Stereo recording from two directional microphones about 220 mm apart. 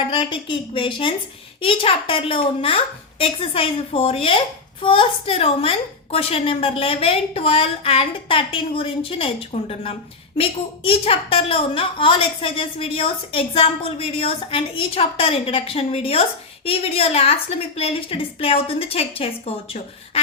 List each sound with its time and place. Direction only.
0.1 s a woman's voice: 20° left (ahead or behind)